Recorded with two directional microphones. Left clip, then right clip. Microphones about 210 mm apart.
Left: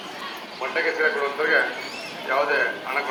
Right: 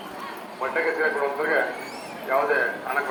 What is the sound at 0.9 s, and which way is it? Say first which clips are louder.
Speech: left 1 dB; 35° right (ahead or behind).